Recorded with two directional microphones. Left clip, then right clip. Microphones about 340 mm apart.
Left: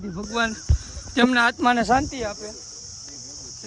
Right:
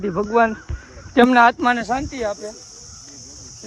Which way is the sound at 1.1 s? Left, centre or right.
Centre.